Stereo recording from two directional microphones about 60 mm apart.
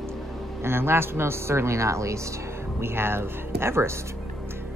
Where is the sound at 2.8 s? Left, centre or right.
Right.